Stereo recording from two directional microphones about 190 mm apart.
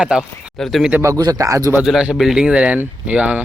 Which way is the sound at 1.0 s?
20° right (ahead or behind).